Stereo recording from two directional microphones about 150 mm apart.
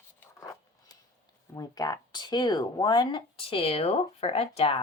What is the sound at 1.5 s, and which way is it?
Speech, 25° left (ahead or behind).